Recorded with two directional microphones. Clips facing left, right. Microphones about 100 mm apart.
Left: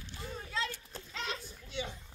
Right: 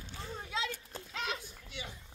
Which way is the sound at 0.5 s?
15° right (ahead or behind).